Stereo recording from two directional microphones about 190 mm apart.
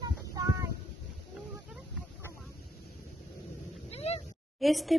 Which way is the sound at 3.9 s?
35° left (ahead or behind).